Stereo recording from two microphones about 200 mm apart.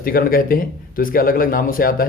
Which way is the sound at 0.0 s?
45° left (ahead or behind).